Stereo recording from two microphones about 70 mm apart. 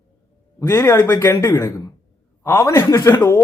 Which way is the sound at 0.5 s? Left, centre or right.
Left.